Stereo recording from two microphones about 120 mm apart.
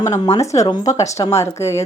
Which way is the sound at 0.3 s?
25° left (ahead or behind).